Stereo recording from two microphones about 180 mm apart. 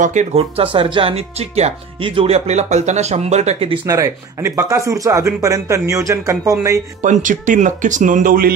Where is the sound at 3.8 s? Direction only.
15° right (ahead or behind).